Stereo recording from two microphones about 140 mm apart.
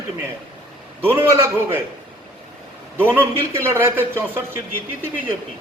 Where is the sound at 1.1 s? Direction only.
20° right (ahead or behind).